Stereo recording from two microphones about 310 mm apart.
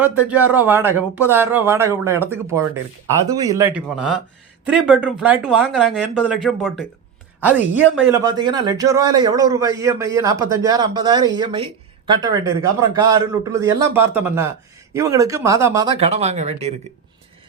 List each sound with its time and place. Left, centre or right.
0.0 s a man's voice: centre
8.1 s a man's voice: centre